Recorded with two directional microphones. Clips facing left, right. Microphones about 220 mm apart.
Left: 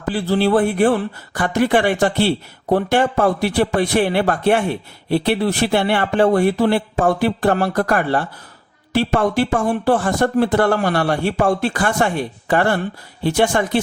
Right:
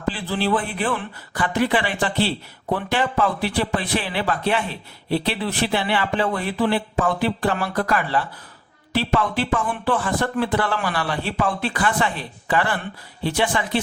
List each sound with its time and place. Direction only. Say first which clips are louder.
0.1 s a man's voice: left 7 dB; 45° left (ahead or behind)